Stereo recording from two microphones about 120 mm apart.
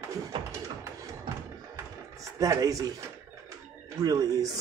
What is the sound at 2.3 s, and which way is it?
Speech, 30° right (ahead or behind).